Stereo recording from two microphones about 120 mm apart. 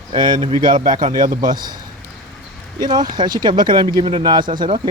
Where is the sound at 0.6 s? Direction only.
90° right.